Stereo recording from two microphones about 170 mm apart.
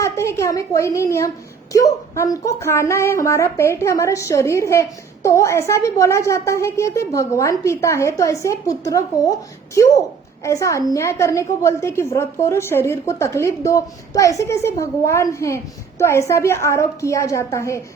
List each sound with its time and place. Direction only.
0.0 s a woman's voice: 15° left (ahead or behind)